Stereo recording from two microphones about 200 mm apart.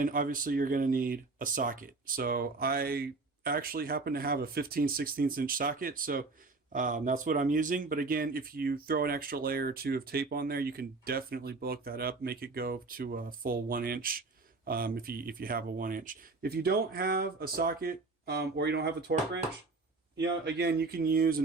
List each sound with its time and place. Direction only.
0.0 s speech: 45° right (ahead or behind)